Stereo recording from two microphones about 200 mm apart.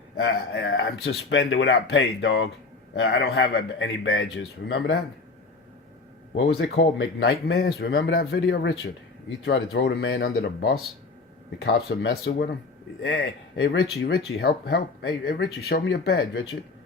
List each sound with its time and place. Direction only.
0.2 s speech: 60° left (ahead or behind)
6.3 s speech: 60° left (ahead or behind)